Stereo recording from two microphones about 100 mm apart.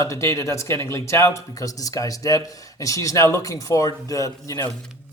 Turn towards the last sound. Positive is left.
turn(degrees=30)  # may be behind; listen again after turning